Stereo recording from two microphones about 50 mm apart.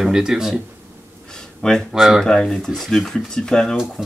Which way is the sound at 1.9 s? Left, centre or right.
Centre.